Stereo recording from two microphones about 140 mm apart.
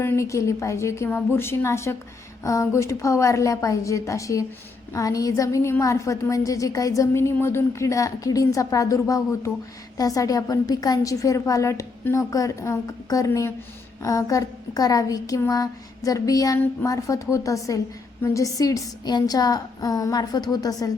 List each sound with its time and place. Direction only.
0.0 s a woman's voice: 20° left (ahead or behind)